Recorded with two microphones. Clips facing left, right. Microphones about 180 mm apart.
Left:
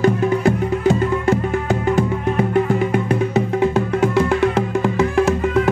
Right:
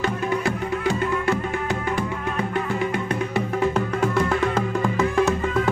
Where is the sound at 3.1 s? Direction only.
20° left (ahead or behind).